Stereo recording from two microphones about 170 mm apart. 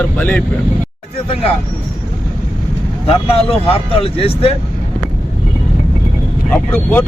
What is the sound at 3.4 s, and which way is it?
Speech, 35° left (ahead or behind).